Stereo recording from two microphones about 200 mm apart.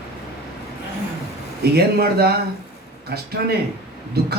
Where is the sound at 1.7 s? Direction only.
50° right (ahead or behind).